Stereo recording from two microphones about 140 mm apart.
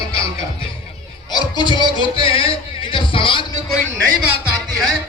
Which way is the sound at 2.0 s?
40° left (ahead or behind).